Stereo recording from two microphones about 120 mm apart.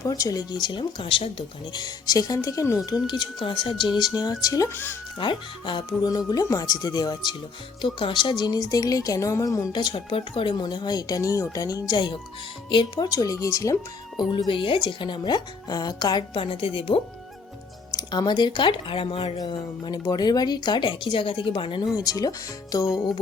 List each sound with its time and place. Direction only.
0.0 s speech: 30° left (ahead or behind)
2.9 s speech: 40° left (ahead or behind); by 4.9 s 20° left (ahead or behind)
5.1 s speech: 40° left (ahead or behind)
6.0 s speech: 35° left (ahead or behind)
14.3 s speech: 45° left (ahead or behind)
17.9 s speech: 35° left (ahead or behind)